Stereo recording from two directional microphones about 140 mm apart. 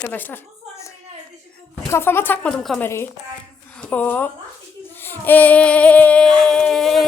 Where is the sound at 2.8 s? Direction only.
15° left (ahead or behind).